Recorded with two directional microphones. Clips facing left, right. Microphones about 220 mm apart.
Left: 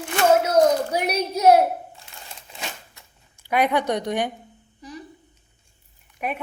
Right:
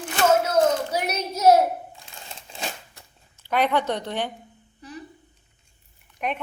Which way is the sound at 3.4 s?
10° left (ahead or behind).